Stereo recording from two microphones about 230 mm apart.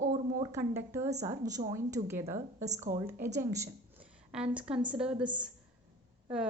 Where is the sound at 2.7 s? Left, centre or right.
Right.